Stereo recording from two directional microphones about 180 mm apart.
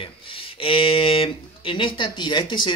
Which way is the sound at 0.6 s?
30° left (ahead or behind).